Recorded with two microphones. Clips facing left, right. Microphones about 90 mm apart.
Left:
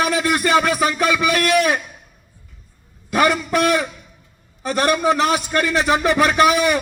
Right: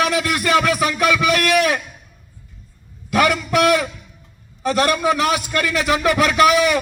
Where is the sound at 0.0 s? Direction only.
30° left (ahead or behind).